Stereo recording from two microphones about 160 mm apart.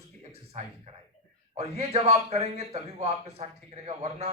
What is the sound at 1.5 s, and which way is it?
A man's voice, 40° right (ahead or behind).